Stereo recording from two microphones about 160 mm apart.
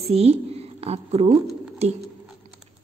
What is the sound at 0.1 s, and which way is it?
A woman's voice, 40° right (ahead or behind).